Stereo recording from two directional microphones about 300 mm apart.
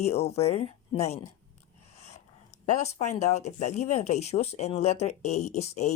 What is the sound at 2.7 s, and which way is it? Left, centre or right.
Speech, left.